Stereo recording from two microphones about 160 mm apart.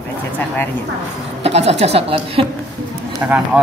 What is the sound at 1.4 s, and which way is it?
A woman's voice, 40° right (ahead or behind).